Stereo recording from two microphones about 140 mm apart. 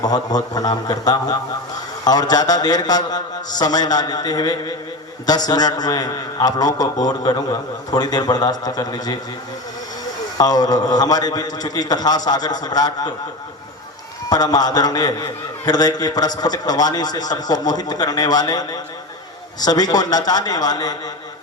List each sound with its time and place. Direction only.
0.0 s a man's voice: 30° left (ahead or behind)
10.3 s a man's voice: 30° left (ahead or behind)
14.3 s a man's voice: 30° left (ahead or behind)